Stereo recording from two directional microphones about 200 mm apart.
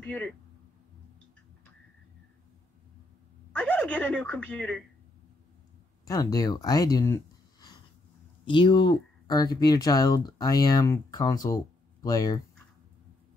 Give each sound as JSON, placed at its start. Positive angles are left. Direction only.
{"t": 0.0, "sound": "speech", "side_deg": 5}
{"t": 3.5, "sound": "speech", "side_deg": 5}
{"t": 6.0, "sound": "speech", "side_deg": 15}
{"t": 8.5, "sound": "speech", "side_deg": 25}